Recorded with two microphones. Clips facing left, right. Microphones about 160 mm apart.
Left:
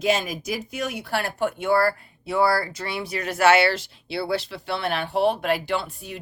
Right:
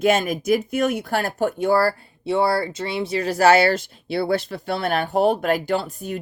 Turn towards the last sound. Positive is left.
turn(degrees=-45)  # may be behind; listen again after turning